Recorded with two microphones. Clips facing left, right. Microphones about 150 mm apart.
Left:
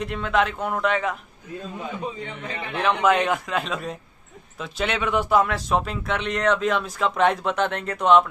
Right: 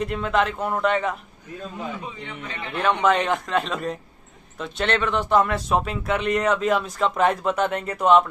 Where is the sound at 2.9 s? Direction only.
5° left (ahead or behind).